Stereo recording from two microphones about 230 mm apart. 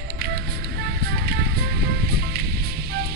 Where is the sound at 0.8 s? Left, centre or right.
Right.